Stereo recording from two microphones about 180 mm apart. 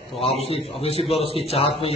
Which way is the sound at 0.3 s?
35° left (ahead or behind).